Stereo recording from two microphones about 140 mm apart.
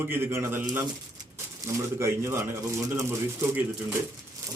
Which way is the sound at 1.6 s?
20° right (ahead or behind).